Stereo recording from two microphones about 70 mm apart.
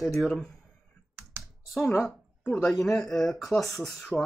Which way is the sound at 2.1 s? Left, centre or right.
Centre.